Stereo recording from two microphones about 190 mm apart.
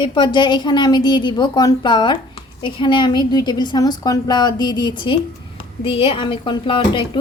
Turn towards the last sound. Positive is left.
turn(degrees=25)  # may be behind; listen again after turning